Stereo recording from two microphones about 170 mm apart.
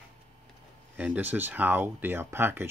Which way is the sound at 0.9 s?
10° right (ahead or behind).